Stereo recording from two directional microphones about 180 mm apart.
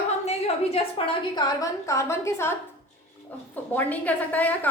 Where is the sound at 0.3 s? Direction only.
35° left (ahead or behind).